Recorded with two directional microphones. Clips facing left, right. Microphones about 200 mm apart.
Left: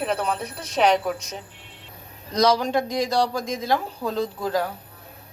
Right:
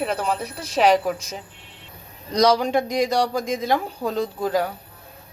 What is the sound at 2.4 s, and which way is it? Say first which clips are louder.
Speech: right 2 dB; 15° right (ahead or behind).